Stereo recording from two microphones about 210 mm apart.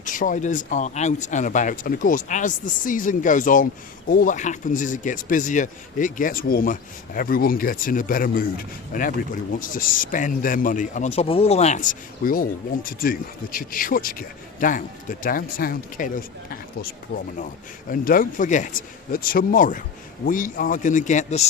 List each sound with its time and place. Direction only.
0.0 s a man's voice: 40° left (ahead or behind)